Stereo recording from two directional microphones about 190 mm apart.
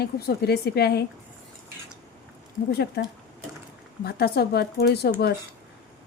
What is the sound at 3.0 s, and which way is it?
Speech, 60° left (ahead or behind).